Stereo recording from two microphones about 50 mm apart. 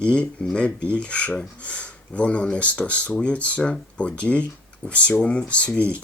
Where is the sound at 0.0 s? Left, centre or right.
Left.